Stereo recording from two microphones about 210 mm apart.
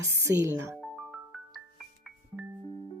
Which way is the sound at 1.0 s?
Centre (ahead or behind).